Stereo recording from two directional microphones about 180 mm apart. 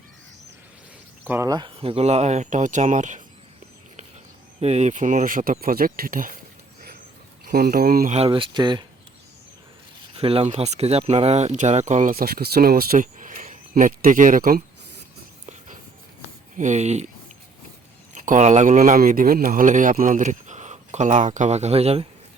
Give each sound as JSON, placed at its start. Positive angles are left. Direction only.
{"t": 1.2, "sound": "speech", "side_deg": -15}
{"t": 4.6, "sound": "speech", "side_deg": -40}
{"t": 7.4, "sound": "speech", "side_deg": -55}
{"t": 8.1, "sound": "speech", "side_deg": -30}
{"t": 10.2, "sound": "speech", "side_deg": -30}
{"t": 16.6, "sound": "speech", "side_deg": -40}
{"t": 18.1, "sound": "speech", "side_deg": -40}